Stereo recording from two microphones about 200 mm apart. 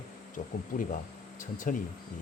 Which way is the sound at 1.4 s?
40° left (ahead or behind).